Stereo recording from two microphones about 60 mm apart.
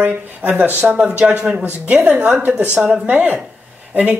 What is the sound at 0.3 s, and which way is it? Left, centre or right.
Speech, right.